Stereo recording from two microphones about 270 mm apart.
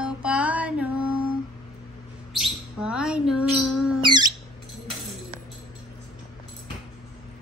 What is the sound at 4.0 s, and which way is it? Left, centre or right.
Squeak, centre.